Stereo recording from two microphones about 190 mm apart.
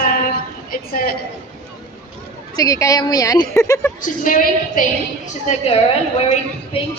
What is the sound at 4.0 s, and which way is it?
Speech, 45° left (ahead or behind).